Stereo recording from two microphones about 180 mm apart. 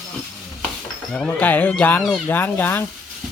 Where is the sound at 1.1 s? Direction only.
5° left (ahead or behind).